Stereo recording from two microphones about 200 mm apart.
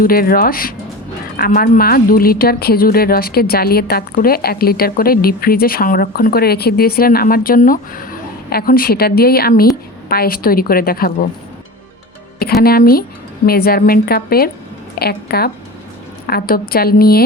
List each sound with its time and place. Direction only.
0.0 s a woman's voice: 45° left (ahead or behind)
12.4 s a woman's voice: 50° left (ahead or behind)